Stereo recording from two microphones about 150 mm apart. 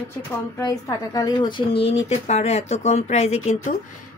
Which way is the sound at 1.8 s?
45° left (ahead or behind).